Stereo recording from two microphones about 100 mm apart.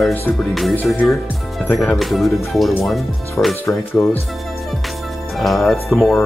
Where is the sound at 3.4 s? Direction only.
20° left (ahead or behind).